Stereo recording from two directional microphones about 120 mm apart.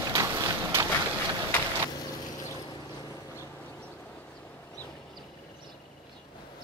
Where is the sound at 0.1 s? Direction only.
30° right (ahead or behind).